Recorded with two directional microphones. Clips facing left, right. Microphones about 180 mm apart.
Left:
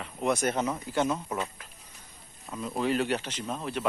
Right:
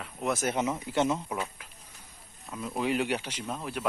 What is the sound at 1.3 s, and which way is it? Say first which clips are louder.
Speech: left 1 dB; 5° right (ahead or behind).